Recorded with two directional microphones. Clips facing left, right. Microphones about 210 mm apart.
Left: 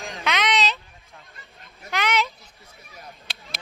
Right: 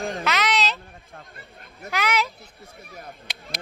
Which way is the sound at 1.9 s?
5° right (ahead or behind).